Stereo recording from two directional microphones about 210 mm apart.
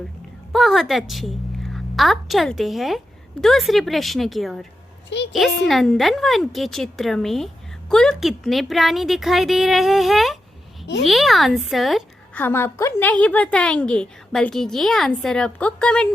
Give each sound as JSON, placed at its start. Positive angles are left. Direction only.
{"t": 0.5, "sound": "a woman's voice", "side_deg": 0}
{"t": 5.0, "sound": "a child's voice", "side_deg": 55}
{"t": 5.6, "sound": "a woman's voice", "side_deg": 0}